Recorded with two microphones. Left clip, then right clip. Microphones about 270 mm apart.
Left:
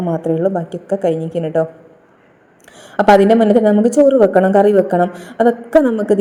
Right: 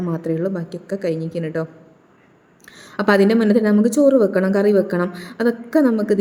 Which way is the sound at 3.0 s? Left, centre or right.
Centre.